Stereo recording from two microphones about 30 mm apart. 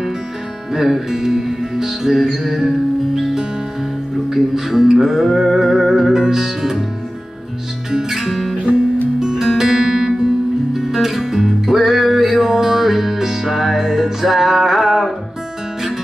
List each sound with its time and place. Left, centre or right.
0.7 s music: centre
6.1 s music: centre
8.1 s music: centre
9.2 s music: centre
10.2 s music: centre